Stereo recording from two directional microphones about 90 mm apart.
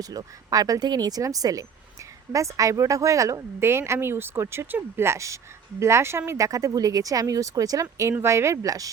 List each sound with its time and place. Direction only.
0.0 s a woman's voice: 45° right (ahead or behind)